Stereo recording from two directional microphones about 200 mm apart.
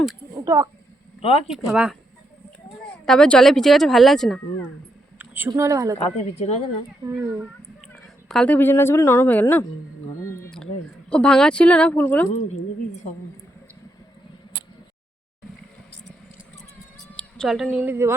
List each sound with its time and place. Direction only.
0.3 s a sound: 15° right (ahead or behind)
1.2 s speech: 30° left (ahead or behind)
1.5 s speech: centre (ahead or behind)
5.2 s a sound: 10° right (ahead or behind)
5.5 s speech: 15° right (ahead or behind)
6.0 s speech: 30° left (ahead or behind)
7.0 s speech: 10° right (ahead or behind)
7.8 s a woman's voice: centre (ahead or behind)
11.1 s speech: 5° left (ahead or behind)
12.3 s speech: 35° left (ahead or behind)
17.2 s speech: centre (ahead or behind)